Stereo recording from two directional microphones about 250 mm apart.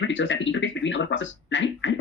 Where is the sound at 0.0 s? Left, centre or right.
Left.